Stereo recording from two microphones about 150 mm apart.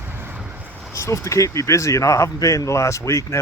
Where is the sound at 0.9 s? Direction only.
20° left (ahead or behind).